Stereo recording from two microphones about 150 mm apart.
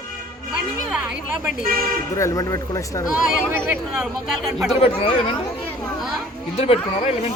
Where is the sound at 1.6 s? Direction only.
75° right (ahead or behind).